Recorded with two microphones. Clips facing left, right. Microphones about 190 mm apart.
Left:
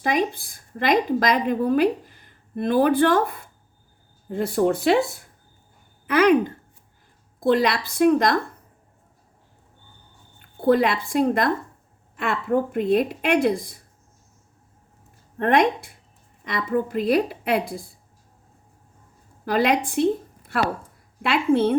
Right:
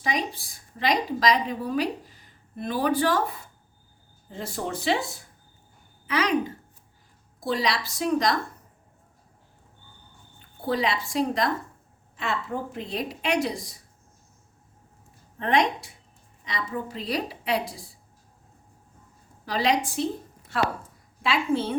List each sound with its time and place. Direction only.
0.0 s a woman's voice: 55° left (ahead or behind)
10.6 s a woman's voice: 55° left (ahead or behind)
15.4 s a woman's voice: 55° left (ahead or behind)
19.5 s a woman's voice: 55° left (ahead or behind)
21.2 s a woman's voice: 60° left (ahead or behind)